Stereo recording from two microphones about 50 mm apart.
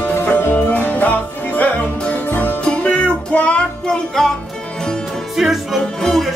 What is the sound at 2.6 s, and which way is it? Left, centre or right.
Music, left.